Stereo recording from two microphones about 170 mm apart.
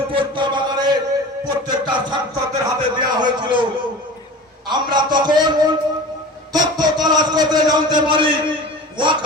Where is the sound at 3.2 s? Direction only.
25° right (ahead or behind).